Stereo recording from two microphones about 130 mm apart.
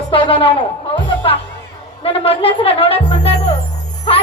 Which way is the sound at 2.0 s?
45° left (ahead or behind).